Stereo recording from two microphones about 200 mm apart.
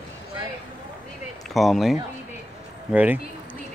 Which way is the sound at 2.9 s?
10° right (ahead or behind).